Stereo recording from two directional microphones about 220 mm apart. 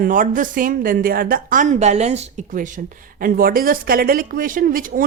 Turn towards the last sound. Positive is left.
turn(degrees=-40)  # may be behind; listen again after turning